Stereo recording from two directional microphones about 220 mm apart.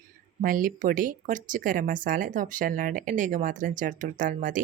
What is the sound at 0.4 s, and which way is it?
Speech, 40° right (ahead or behind).